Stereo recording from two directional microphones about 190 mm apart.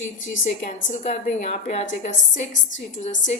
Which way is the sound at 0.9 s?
40° left (ahead or behind).